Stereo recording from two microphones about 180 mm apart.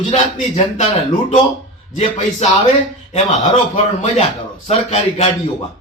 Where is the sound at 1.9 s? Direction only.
35° left (ahead or behind).